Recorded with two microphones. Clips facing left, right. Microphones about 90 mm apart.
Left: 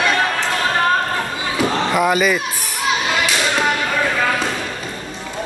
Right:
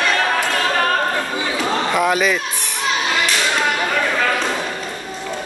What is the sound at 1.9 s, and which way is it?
Speech, centre (ahead or behind).